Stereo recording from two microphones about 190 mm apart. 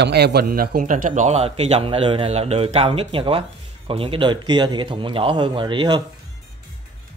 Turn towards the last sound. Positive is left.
turn(degrees=-25)  # may be behind; listen again after turning